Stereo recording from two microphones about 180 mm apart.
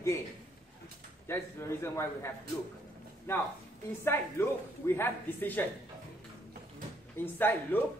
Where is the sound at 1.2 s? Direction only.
15° left (ahead or behind).